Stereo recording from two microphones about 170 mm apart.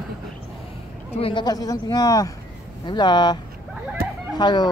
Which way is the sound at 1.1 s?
30° left (ahead or behind).